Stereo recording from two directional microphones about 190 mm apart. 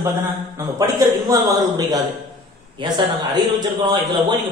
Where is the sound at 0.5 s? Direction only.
15° right (ahead or behind).